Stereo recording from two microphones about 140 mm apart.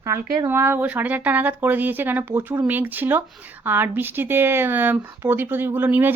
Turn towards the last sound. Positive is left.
turn(degrees=-15)  # may be behind; listen again after turning